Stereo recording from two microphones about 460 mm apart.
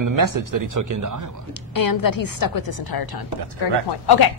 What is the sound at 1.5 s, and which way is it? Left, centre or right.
A woman's voice, left.